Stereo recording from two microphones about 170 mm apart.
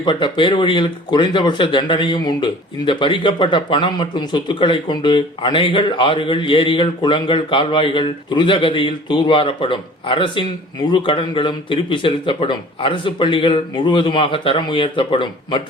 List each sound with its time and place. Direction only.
0.0 s speech: 30° left (ahead or behind)